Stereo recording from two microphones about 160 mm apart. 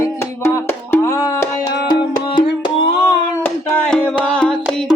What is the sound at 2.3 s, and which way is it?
Music, 30° left (ahead or behind).